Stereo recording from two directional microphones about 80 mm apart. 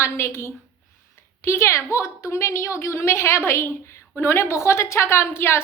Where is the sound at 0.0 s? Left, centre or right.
Left.